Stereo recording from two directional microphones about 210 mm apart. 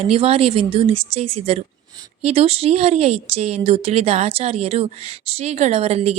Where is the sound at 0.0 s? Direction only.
30° right (ahead or behind).